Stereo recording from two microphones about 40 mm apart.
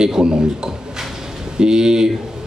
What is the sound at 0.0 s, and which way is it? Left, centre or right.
A man's voice, centre.